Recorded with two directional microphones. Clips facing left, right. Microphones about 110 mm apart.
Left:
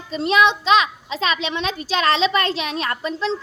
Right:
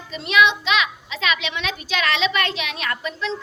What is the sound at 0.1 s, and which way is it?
A child's voice, 35° left (ahead or behind).